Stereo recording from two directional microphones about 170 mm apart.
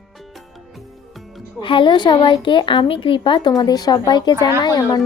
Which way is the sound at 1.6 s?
30° left (ahead or behind).